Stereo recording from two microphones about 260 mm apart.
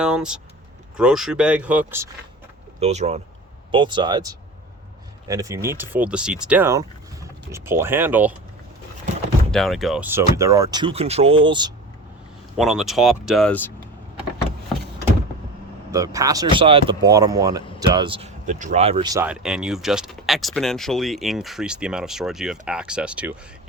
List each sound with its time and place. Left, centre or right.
0.0 s speech: centre
2.8 s speech: right; by 8.3 s centre
9.5 s speech: centre
12.5 s speech: centre
15.9 s speech: centre